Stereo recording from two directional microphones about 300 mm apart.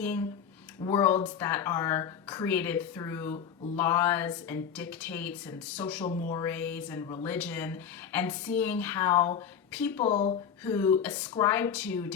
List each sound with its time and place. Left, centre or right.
0.0 s speech: centre
10.0 s speech: left
10.7 s speech: centre